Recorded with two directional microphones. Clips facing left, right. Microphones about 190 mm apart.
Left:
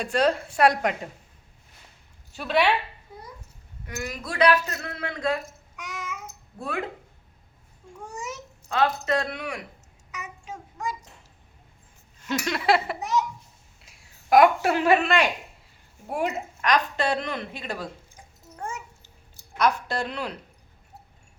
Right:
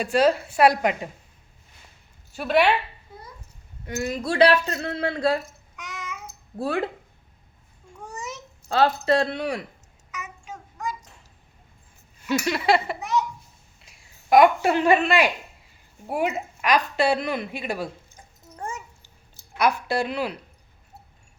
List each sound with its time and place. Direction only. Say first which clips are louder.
0.0 s a woman's voice: right 3 dB; 5° right (ahead or behind)
2.3 s a woman's voice: right 3 dB; 5° right (ahead or behind)
3.8 s speech: right 7 dB; 25° right (ahead or behind)
5.7 s babbling: left 1 dB; 10° left (ahead or behind)
6.6 s speech: right 5 dB; 35° right (ahead or behind)
8.1 s babbling: even; 10° left (ahead or behind)
8.7 s speech: right 4 dB; 30° right (ahead or behind)
10.1 s a sound: right 1 dB; 30° left (ahead or behind)
12.2 s a woman's voice: right 3 dB; 5° right (ahead or behind)
19.5 s a woman's voice: right 2 dB; 10° right (ahead or behind)